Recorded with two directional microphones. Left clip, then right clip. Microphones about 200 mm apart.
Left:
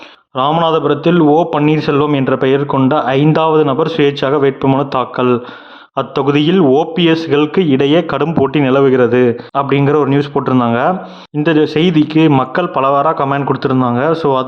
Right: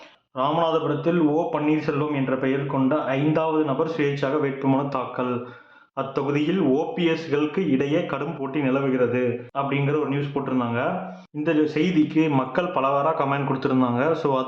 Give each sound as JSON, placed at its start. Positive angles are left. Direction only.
{"t": 0.3, "sound": "a man's voice", "side_deg": 50}